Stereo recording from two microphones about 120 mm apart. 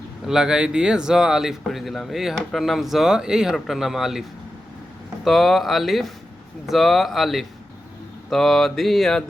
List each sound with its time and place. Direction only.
0.3 s speech: 5° right (ahead or behind)